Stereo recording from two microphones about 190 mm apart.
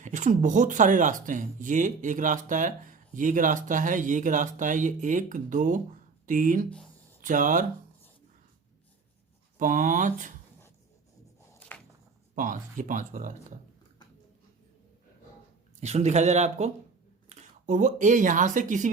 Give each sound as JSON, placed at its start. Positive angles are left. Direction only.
{"t": 0.0, "sound": "speech", "side_deg": -40}
{"t": 6.7, "sound": "a sound", "side_deg": 5}
{"t": 7.2, "sound": "speech", "side_deg": -40}
{"t": 9.6, "sound": "speech", "side_deg": -45}
{"t": 11.7, "sound": "a sound", "side_deg": 10}
{"t": 12.3, "sound": "speech", "side_deg": -45}
{"t": 15.8, "sound": "speech", "side_deg": -35}